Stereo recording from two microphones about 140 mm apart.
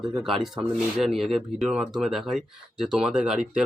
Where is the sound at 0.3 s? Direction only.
Centre (ahead or behind).